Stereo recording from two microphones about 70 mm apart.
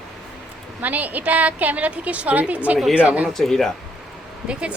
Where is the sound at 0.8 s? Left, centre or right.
Right.